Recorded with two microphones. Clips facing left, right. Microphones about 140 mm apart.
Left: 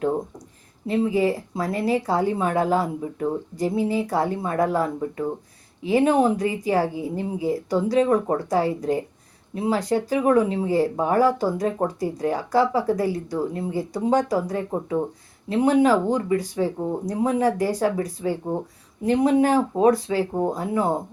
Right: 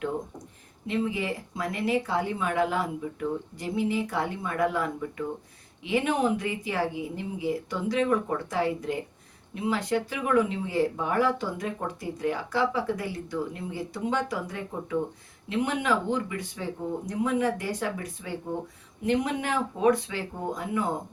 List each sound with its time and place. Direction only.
0.9 s speech: 35° left (ahead or behind)